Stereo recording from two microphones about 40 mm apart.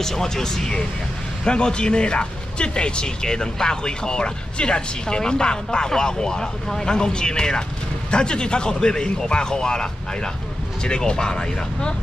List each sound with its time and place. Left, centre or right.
0.0 s speech: centre